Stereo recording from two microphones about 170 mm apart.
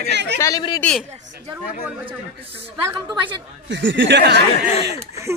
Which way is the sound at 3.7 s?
90° right.